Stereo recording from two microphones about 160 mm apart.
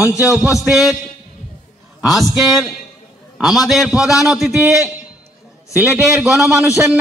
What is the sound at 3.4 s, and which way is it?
A man's voice, centre (ahead or behind).